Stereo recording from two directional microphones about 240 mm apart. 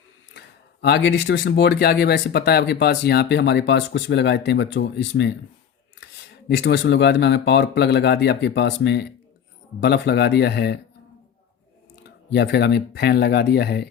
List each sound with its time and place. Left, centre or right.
0.3 s speech: left
12.3 s speech: left